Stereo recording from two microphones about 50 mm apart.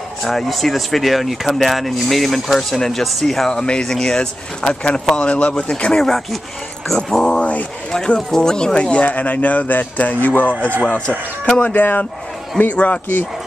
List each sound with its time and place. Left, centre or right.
0.2 s speech: centre; by 9.1 s left
9.1 s speech: left
11.1 s speech: centre
11.6 s speech: left
12.7 s speech: left